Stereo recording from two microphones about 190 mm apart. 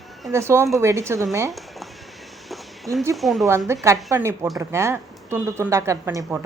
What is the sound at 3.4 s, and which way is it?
A woman's voice, 15° right (ahead or behind).